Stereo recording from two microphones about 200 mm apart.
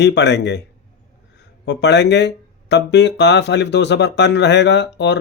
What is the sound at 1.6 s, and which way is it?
Speech, 60° left (ahead or behind).